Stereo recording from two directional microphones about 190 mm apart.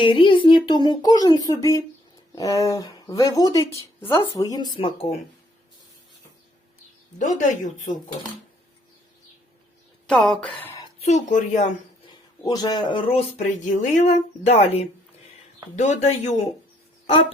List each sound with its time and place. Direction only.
0.0 s speech: 25° left (ahead or behind)
7.2 s a woman's voice: 40° left (ahead or behind)
10.1 s speech: 5° left (ahead or behind)
11.0 s a woman's voice: 40° left (ahead or behind)
12.5 s speech: 20° left (ahead or behind)
13.7 s a woman's voice: 40° left (ahead or behind)